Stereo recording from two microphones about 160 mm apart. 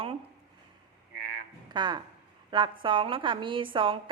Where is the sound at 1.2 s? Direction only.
70° right (ahead or behind).